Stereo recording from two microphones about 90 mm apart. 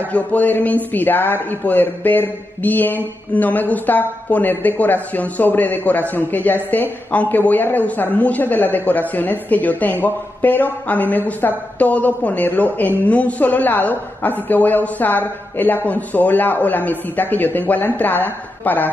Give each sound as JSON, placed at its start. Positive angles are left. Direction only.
{"t": 0.1, "sound": "a man's voice", "side_deg": 15}